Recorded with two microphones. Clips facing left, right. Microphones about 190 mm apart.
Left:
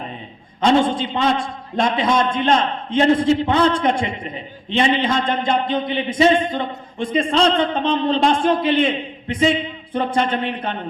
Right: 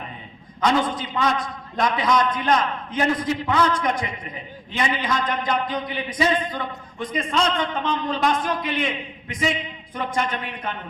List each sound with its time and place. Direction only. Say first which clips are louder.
0.6 s a man's voice: left 5 dB; 25° left (ahead or behind)